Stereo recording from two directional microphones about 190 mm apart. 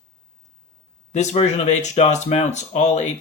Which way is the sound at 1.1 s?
35° left (ahead or behind).